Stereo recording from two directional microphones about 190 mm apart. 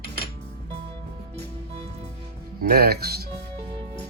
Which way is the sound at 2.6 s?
55° right (ahead or behind).